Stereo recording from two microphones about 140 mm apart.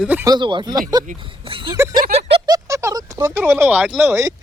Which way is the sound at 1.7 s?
20° right (ahead or behind).